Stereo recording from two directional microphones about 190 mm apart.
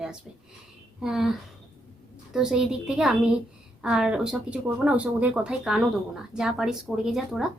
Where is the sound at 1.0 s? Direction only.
Centre (ahead or behind).